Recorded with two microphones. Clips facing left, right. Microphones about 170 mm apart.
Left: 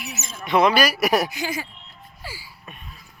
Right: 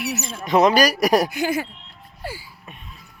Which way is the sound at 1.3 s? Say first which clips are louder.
Right 6 dB; 55° right (ahead or behind).